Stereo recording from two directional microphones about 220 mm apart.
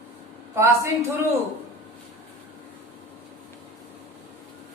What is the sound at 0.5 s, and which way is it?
Speech, 10° right (ahead or behind).